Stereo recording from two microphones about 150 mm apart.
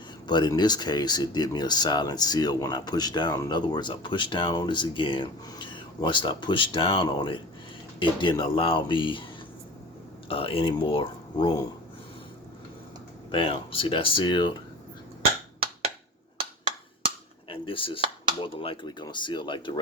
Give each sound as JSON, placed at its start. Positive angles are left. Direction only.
{"t": 0.3, "sound": "speech", "side_deg": 30}
{"t": 10.2, "sound": "speech", "side_deg": 40}
{"t": 13.3, "sound": "speech", "side_deg": 35}
{"t": 17.5, "sound": "a sound", "side_deg": 35}
{"t": 18.4, "sound": "speech", "side_deg": 35}